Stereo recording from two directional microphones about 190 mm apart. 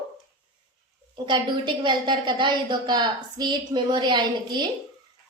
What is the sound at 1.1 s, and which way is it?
A woman's voice, 25° right (ahead or behind).